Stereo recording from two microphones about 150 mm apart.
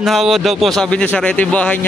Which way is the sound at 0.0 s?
Centre (ahead or behind).